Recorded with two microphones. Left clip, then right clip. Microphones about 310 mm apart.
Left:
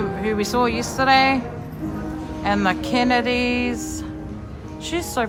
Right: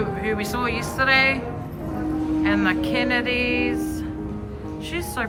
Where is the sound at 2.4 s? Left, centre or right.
Centre.